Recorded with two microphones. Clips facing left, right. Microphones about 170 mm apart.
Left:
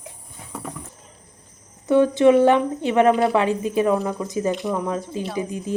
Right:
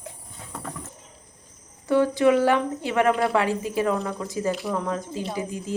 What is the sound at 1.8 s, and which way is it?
Speech, 20° left (ahead or behind).